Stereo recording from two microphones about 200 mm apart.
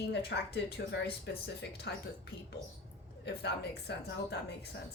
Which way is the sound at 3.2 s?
55° left (ahead or behind).